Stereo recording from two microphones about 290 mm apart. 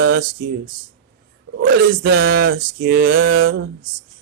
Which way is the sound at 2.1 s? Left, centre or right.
Right.